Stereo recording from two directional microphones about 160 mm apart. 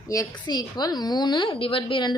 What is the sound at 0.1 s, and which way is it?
A woman's voice, 25° left (ahead or behind).